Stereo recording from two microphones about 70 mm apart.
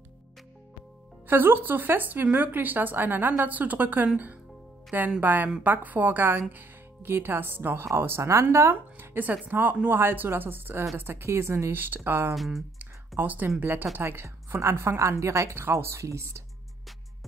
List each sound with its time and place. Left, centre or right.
1.2 s a woman's voice: right
5.2 s a woman's voice: right
12.4 s speech: centre
13.2 s a woman's voice: right